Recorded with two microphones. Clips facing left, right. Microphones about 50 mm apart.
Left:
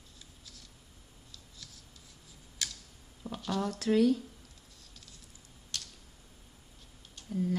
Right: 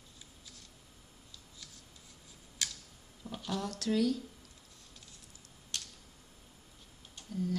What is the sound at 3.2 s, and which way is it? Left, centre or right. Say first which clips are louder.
Speech: left 4 dB; centre.